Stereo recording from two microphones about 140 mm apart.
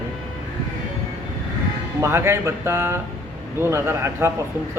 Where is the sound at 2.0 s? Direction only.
20° right (ahead or behind).